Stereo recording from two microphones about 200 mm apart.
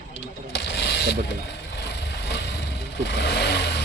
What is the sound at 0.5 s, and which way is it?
Mechanisms, 60° left (ahead or behind).